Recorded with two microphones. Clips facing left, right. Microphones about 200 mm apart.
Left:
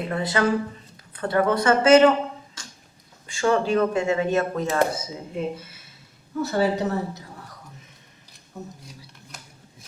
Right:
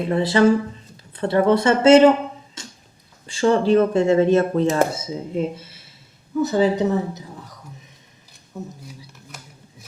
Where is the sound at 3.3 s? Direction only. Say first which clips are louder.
Right 5 dB; 35° right (ahead or behind).